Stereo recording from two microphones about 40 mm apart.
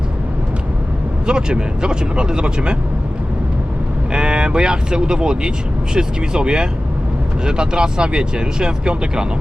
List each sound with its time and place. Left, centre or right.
1.3 s speech: right
4.1 s speech: right